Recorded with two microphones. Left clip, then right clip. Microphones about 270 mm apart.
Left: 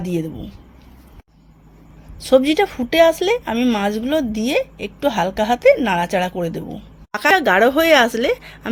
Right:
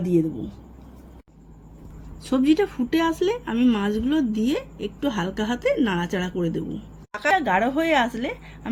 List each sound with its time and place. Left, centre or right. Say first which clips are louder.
0.0 s a woman's voice: right 2 dB; left
2.3 s a woman's voice: left 7 dB; left